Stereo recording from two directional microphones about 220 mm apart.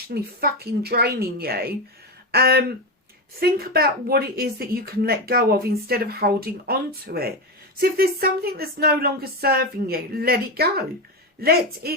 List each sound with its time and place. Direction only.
0.1 s speech: 45° right (ahead or behind)